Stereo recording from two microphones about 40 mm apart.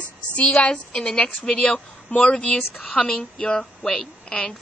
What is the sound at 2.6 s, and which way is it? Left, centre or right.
Speech, left.